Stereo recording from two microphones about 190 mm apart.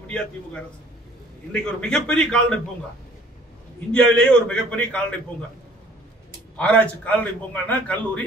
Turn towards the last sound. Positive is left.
turn(degrees=10)  # may be behind; listen again after turning